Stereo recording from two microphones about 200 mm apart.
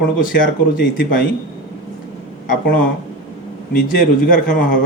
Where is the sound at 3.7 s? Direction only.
45° left (ahead or behind).